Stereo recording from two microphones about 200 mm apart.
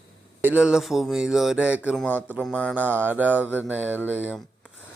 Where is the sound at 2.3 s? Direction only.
10° right (ahead or behind).